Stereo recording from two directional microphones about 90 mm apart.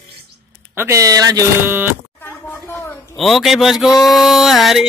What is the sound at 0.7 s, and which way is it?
Speech, 25° right (ahead or behind).